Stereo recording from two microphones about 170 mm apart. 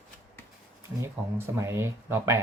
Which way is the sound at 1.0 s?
15° right (ahead or behind).